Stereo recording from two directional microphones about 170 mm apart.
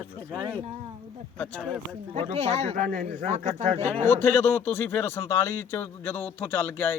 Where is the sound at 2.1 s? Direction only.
40° right (ahead or behind).